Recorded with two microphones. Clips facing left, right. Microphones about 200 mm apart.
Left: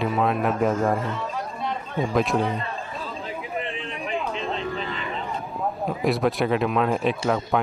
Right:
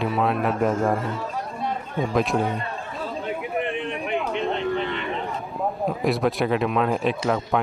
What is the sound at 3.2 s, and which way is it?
Chatter, 70° right (ahead or behind).